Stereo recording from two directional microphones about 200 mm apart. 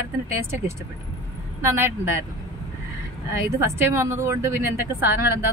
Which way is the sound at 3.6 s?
10° right (ahead or behind).